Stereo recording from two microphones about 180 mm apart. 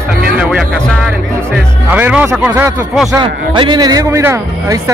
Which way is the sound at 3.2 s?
25° right (ahead or behind).